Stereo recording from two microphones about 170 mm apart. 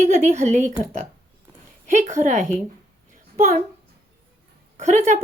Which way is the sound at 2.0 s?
45° right (ahead or behind).